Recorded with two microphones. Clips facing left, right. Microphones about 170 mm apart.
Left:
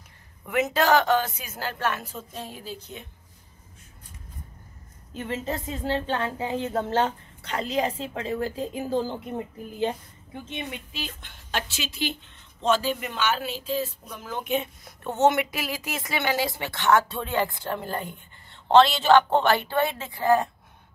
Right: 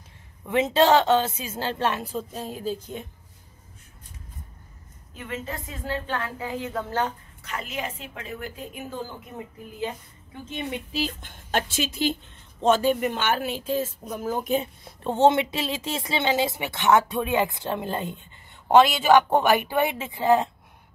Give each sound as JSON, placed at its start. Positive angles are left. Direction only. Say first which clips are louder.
{"t": 0.5, "sound": "a woman's voice", "louder": "right 3 dB", "side_deg": -25}
{"t": 5.1, "sound": "speech", "louder": "left 4 dB", "side_deg": 30}
{"t": 10.9, "sound": "a woman's voice", "louder": "right 8 dB", "side_deg": -40}